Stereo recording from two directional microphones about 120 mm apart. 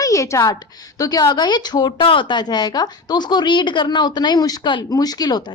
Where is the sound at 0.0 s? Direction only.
25° left (ahead or behind).